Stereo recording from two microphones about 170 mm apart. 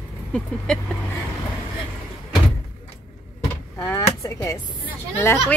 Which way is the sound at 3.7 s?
20° left (ahead or behind).